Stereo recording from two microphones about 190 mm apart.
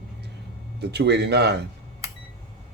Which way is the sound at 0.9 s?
60° right (ahead or behind).